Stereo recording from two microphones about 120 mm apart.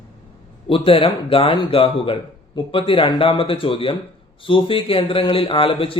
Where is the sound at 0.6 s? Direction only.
50° left (ahead or behind).